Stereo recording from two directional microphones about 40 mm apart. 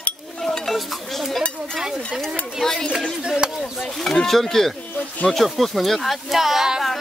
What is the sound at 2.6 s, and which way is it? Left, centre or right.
Speech, centre.